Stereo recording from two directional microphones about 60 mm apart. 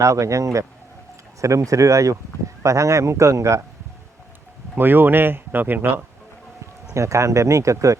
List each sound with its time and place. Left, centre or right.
0.0 s speech: right
4.8 s speech: right
6.9 s speech: right